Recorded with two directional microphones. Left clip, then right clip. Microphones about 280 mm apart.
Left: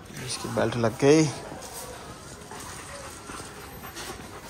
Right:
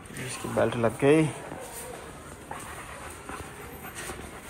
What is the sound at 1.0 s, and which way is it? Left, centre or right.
Speech, left.